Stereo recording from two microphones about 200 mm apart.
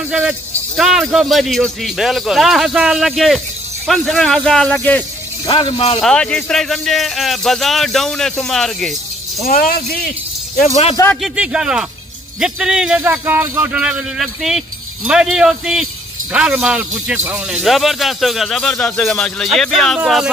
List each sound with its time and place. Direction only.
0.1 s speech: 5° right (ahead or behind)
5.5 s speech: 20° left (ahead or behind)
5.9 s speech: 5° left (ahead or behind)
9.4 s speech: 40° left (ahead or behind)
11.1 s speech: 5° right (ahead or behind)